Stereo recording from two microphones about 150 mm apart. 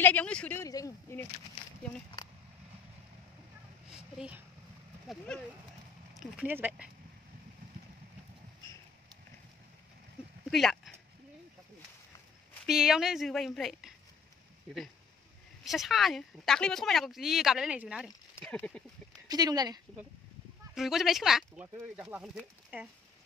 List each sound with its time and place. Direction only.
0.0 s speech: 10° left (ahead or behind)
0.6 s speech: 20° left (ahead or behind)
3.9 s a sound: 5° right (ahead or behind)
5.0 s speech: 5° left (ahead or behind)
6.1 s speech: 10° right (ahead or behind)
10.5 s speech: centre (ahead or behind)
12.6 s speech: 5° right (ahead or behind)
15.6 s speech: centre (ahead or behind)
18.4 s speech: 5° left (ahead or behind)
19.2 s speech: 25° right (ahead or behind)
20.7 s speech: centre (ahead or behind)